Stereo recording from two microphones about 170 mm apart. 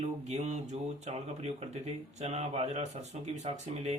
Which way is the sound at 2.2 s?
40° right (ahead or behind).